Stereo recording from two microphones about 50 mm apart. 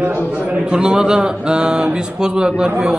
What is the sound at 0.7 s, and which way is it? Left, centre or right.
A man's voice, centre.